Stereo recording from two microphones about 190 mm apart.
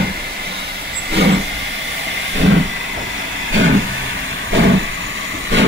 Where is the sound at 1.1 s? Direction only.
60° right (ahead or behind).